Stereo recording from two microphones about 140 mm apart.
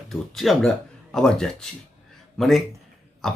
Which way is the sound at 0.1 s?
Centre (ahead or behind).